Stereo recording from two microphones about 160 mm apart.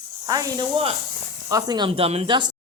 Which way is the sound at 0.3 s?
25° right (ahead or behind).